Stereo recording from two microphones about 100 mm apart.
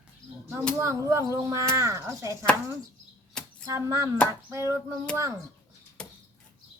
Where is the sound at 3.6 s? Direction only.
30° right (ahead or behind).